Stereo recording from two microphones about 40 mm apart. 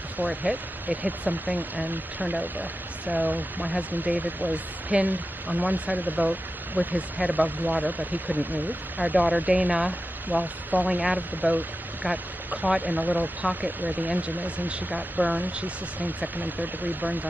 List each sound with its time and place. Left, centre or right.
0.2 s speech: right
11.0 s speech: right
12.6 s speech: right
12.9 s speech: right
16.3 s speech: right